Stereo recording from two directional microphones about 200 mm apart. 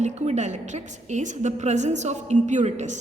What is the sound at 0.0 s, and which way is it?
A woman's voice, 35° right (ahead or behind).